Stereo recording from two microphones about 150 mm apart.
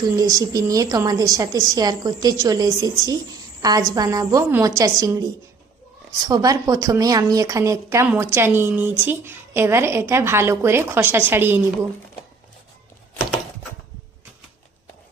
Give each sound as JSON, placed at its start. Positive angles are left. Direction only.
{"t": 0.0, "sound": "a woman's voice", "side_deg": -25}